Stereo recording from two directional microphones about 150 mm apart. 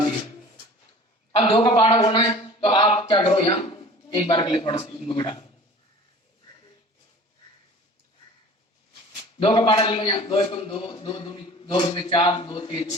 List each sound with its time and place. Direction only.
1.4 s a man's voice: 35° left (ahead or behind)
9.4 s a man's voice: 30° left (ahead or behind)